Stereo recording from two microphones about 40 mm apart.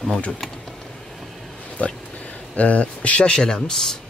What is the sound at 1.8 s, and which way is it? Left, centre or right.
Speech, left.